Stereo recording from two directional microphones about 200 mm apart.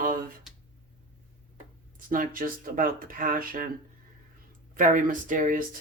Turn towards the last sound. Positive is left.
turn(degrees=-40)  # may be behind; listen again after turning